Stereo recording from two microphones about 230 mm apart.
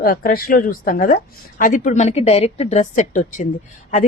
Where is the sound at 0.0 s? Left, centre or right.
Left.